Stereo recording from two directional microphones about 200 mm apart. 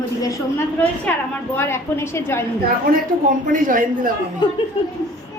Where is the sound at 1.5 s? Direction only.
15° left (ahead or behind).